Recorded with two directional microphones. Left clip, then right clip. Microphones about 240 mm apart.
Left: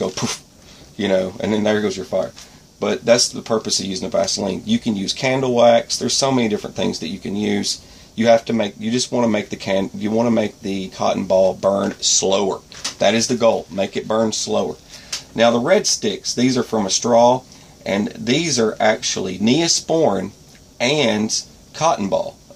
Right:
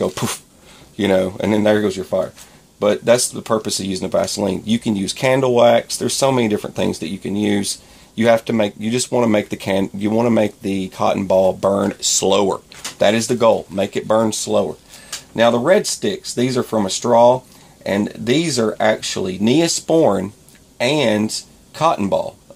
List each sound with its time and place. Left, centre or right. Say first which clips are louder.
0.0 s speech: right 2 dB; right